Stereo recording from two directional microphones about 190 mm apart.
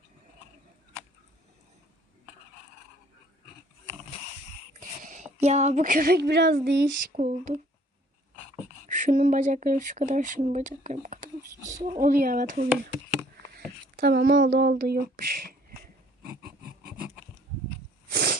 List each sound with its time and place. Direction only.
4.8 s speech: 40° right (ahead or behind); by 6.8 s 60° right (ahead or behind)
7.2 s speech: 40° right (ahead or behind)
8.9 s speech: 40° right (ahead or behind)
14.0 s speech: 55° right (ahead or behind)
18.1 s a sound: 60° right (ahead or behind)